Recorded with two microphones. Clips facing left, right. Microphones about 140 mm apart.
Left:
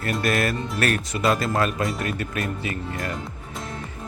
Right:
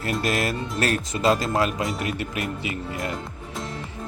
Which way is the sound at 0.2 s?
20° right (ahead or behind).